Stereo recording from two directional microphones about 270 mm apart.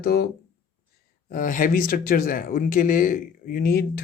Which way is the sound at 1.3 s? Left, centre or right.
Left.